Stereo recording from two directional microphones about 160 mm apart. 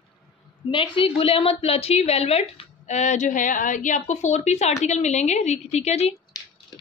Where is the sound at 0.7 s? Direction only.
35° left (ahead or behind).